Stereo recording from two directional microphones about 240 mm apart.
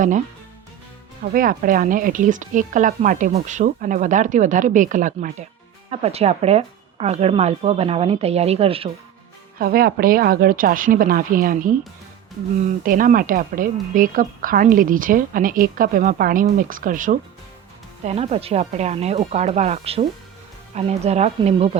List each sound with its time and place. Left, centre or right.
1.2 s speech: right
9.6 s speech: right
12.8 s speech: right